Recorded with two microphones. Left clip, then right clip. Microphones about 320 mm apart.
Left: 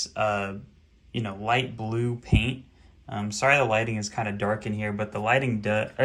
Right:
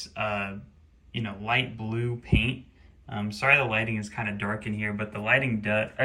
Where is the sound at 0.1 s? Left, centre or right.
Centre.